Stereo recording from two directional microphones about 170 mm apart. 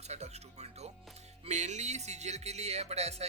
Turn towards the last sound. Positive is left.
turn(degrees=-40)  # may be behind; listen again after turning